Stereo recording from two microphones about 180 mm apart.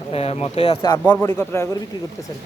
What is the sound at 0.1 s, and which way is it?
Speech, 35° left (ahead or behind).